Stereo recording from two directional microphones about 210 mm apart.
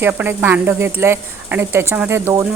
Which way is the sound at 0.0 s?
10° right (ahead or behind).